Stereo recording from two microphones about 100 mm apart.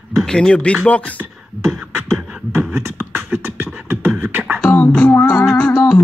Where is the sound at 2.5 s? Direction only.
25° right (ahead or behind).